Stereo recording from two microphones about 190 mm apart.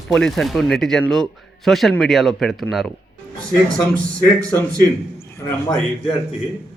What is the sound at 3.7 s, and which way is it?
Speech, 45° right (ahead or behind).